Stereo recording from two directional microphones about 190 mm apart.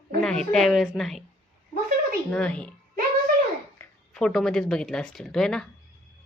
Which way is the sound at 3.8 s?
5° left (ahead or behind).